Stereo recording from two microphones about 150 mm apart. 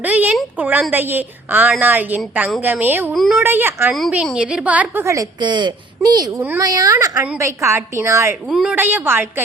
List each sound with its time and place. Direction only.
0.0 s a woman's voice: 10° right (ahead or behind)
3.1 s a woman's voice: centre (ahead or behind)
3.4 s a woman's voice: 15° right (ahead or behind)
5.0 s a woman's voice: 25° right (ahead or behind)
8.4 s a woman's voice: 5° right (ahead or behind)